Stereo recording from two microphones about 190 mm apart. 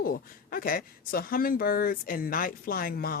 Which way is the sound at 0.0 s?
50° left (ahead or behind).